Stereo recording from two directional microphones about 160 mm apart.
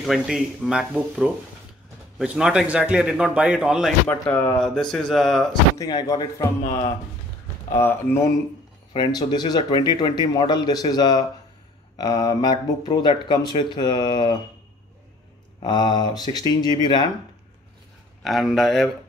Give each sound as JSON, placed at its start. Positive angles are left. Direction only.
{"t": 0.0, "sound": "a man's voice", "side_deg": 0}
{"t": 4.1, "sound": "a man's voice", "side_deg": 10}
{"t": 5.8, "sound": "speech", "side_deg": 25}
{"t": 8.9, "sound": "speech", "side_deg": 25}
{"t": 15.6, "sound": "speech", "side_deg": 25}
{"t": 18.2, "sound": "a man's voice", "side_deg": 0}